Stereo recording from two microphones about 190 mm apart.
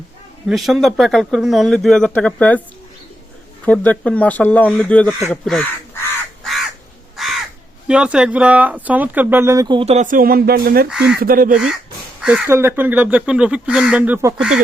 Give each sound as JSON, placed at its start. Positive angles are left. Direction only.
{"t": 0.4, "sound": "speech", "side_deg": 0}
{"t": 3.7, "sound": "speech", "side_deg": 5}
{"t": 7.2, "sound": "crow", "side_deg": 0}
{"t": 7.9, "sound": "speech", "side_deg": -5}
{"t": 12.2, "sound": "speech", "side_deg": -10}